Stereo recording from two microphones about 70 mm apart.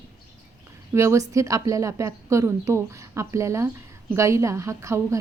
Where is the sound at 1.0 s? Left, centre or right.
Right.